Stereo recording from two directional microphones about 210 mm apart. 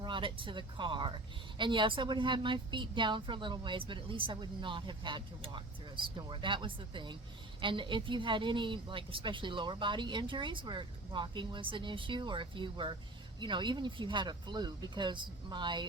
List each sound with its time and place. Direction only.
0.0 s speech: 25° right (ahead or behind)